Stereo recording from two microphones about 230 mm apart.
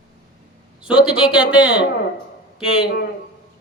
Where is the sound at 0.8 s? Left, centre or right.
Centre.